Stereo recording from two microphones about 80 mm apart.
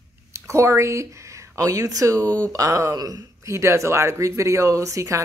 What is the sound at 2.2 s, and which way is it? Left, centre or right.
Speech, centre.